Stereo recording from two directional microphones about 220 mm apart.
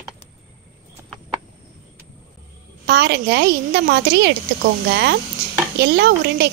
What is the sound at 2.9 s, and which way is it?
Speech, 50° right (ahead or behind).